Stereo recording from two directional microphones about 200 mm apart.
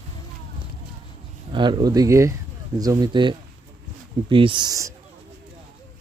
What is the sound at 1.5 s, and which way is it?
Speech, 25° right (ahead or behind).